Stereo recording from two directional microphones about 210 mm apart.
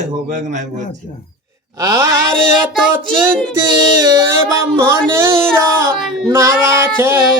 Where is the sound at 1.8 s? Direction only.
15° right (ahead or behind).